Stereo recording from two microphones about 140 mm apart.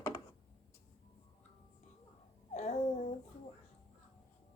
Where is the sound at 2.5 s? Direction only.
55° left (ahead or behind).